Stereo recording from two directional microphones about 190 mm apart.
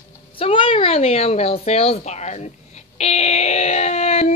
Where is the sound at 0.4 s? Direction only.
30° left (ahead or behind).